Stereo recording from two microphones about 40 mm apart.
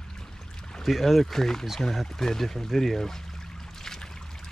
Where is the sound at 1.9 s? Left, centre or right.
Centre.